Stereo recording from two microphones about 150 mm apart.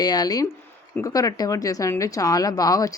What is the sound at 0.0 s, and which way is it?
A woman's voice, 25° left (ahead or behind).